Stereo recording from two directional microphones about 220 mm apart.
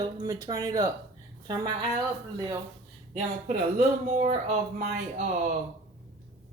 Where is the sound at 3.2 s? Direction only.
35° right (ahead or behind).